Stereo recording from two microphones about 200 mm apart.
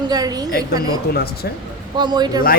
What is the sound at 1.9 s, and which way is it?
Speech, 20° right (ahead or behind).